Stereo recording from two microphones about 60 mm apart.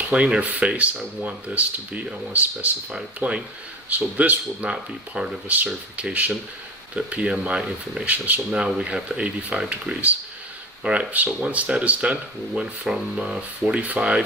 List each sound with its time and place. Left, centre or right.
0.0 s speech: centre
11.1 s speech: right